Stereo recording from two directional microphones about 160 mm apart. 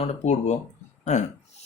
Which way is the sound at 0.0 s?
45° left (ahead or behind).